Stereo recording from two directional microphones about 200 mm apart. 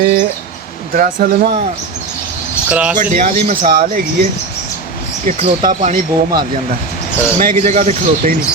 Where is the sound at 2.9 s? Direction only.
40° right (ahead or behind).